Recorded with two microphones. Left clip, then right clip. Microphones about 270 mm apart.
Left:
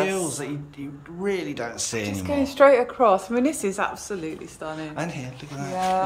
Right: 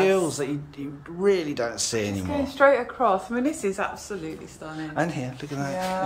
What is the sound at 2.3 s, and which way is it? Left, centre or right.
A woman's voice, left.